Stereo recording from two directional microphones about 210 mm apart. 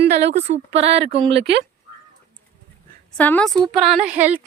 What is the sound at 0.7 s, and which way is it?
Speech, 30° right (ahead or behind).